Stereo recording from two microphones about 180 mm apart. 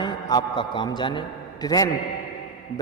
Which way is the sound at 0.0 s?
25° left (ahead or behind).